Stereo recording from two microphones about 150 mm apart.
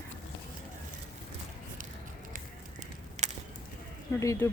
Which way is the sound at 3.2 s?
50° right (ahead or behind).